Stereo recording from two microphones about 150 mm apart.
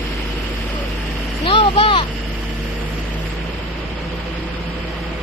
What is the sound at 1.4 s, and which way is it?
Vehicle, 35° left (ahead or behind).